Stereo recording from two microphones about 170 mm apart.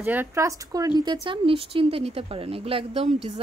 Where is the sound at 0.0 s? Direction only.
10° right (ahead or behind).